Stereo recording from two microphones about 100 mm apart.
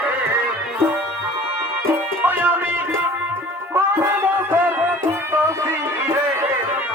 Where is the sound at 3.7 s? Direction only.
25° right (ahead or behind).